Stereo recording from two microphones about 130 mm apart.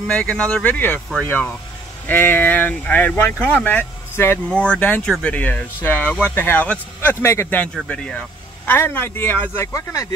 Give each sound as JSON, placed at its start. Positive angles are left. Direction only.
{"t": 0.0, "sound": "speech", "side_deg": 10}